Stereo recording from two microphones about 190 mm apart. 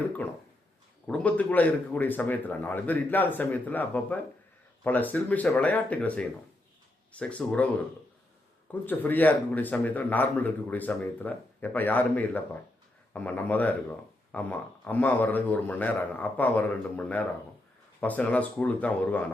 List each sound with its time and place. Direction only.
1.0 s speech: 5° left (ahead or behind)
8.9 s speech: 10° left (ahead or behind)